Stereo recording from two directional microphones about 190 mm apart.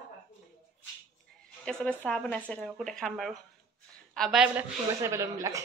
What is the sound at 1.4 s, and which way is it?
Speech, 5° left (ahead or behind).